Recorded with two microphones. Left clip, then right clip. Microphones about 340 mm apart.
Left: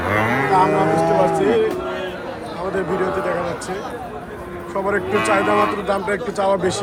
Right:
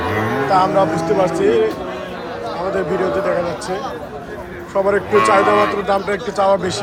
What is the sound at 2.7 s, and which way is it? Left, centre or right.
Speech, centre.